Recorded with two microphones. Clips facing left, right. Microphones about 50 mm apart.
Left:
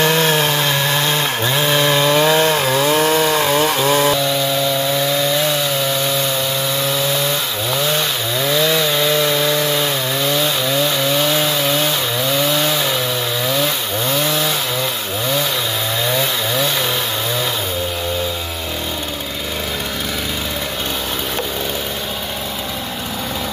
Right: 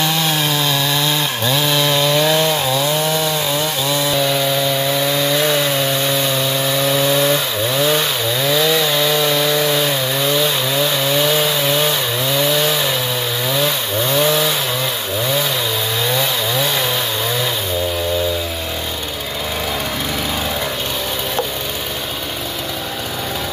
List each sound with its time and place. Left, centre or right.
0.0 s chainsaw: left
8.5 s chainsaw: centre
11.1 s chainsaw: centre